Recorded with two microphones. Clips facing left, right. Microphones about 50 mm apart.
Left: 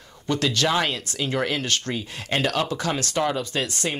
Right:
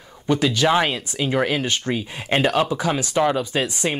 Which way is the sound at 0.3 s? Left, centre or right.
Centre.